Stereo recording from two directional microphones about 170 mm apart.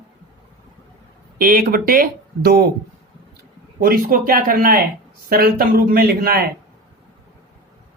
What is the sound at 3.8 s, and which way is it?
Speech, 55° right (ahead or behind).